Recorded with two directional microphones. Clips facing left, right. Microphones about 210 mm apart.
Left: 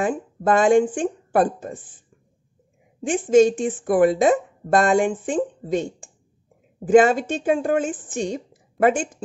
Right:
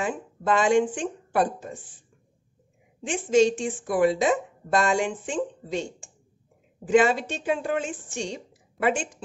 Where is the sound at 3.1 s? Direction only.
50° left (ahead or behind).